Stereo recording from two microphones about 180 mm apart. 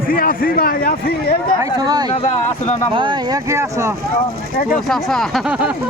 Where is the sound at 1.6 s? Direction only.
20° right (ahead or behind).